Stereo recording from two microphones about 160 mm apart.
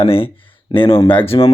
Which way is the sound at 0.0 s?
35° left (ahead or behind).